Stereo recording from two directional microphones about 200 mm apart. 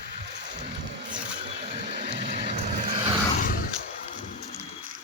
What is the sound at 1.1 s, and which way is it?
Vehicle, 30° right (ahead or behind).